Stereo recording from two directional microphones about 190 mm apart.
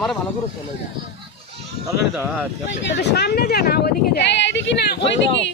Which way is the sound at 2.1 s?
10° right (ahead or behind).